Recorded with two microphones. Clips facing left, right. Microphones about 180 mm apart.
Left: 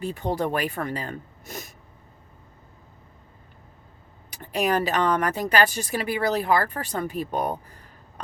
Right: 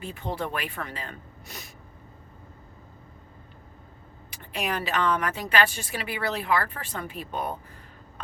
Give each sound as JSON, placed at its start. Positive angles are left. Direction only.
{"t": 0.0, "sound": "speech", "side_deg": 40}
{"t": 4.3, "sound": "speech", "side_deg": 40}